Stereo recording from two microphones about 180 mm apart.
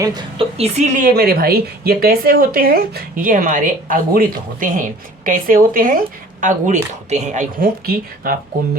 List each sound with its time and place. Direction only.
0.0 s a woman's voice: 25° right (ahead or behind); by 7.4 s 40° right (ahead or behind)
7.6 s a woman's voice: 55° right (ahead or behind)